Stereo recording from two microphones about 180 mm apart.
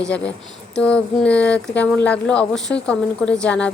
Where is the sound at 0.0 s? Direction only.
5° left (ahead or behind).